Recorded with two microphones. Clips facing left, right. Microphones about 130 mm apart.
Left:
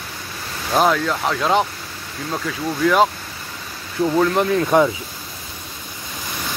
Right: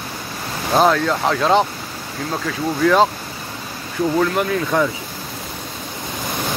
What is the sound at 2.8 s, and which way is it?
Speech, 5° left (ahead or behind).